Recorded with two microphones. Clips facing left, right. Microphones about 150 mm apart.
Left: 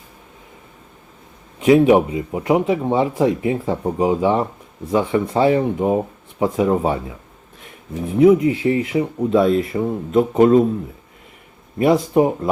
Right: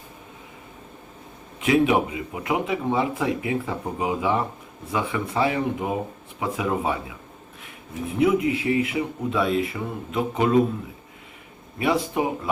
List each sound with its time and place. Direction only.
1.6 s speech: 35° left (ahead or behind)
11.8 s speech: 40° left (ahead or behind)